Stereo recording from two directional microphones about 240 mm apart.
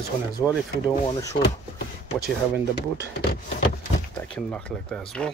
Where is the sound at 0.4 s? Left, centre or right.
Centre.